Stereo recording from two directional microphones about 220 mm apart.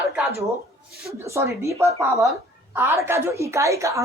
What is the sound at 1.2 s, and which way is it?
A woman's voice, 15° right (ahead or behind).